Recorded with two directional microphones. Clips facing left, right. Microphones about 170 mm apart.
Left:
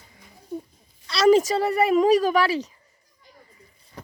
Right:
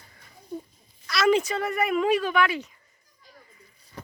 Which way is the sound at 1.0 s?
35° left (ahead or behind).